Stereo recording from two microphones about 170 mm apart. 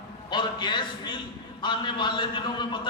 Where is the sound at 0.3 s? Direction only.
25° left (ahead or behind).